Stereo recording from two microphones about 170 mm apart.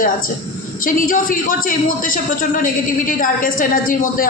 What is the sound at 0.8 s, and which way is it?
A man's voice, 55° left (ahead or behind).